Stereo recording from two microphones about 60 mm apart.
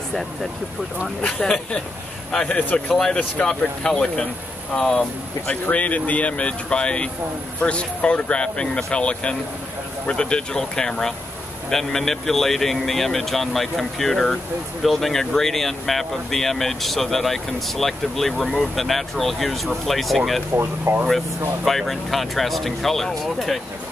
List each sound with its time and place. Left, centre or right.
1.2 s speech: centre
5.5 s speech: left; by 20.4 s centre
20.5 s speech: right
21.6 s speech: centre